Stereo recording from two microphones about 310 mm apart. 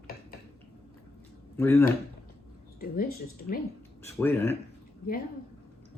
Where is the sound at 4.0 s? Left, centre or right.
Centre.